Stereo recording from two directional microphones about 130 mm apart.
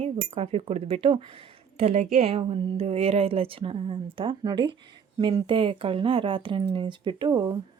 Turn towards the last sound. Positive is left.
turn(degrees=-35)  # may be behind; listen again after turning